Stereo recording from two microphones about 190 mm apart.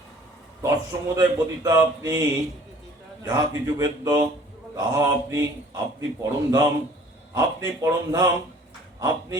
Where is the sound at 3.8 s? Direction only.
20° right (ahead or behind).